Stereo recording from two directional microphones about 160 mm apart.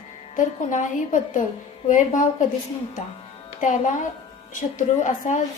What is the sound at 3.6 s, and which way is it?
Music, 55° left (ahead or behind).